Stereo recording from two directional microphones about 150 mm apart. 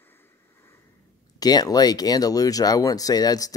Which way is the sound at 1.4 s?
25° left (ahead or behind).